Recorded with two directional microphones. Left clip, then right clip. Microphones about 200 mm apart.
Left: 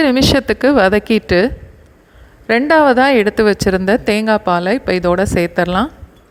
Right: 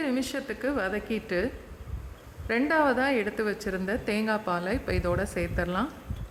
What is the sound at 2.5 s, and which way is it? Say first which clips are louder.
Speech: left 14 dB; 35° left (ahead or behind).